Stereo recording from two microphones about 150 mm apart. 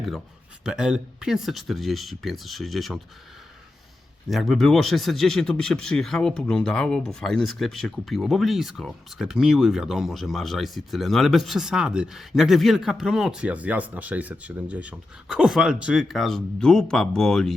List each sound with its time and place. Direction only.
0.6 s speech: 5° right (ahead or behind)
4.3 s speech: centre (ahead or behind)